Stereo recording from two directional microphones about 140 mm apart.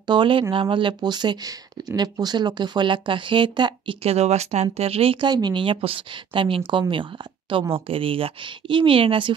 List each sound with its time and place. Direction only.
0.0 s speech: 35° right (ahead or behind)
4.0 s speech: 50° right (ahead or behind)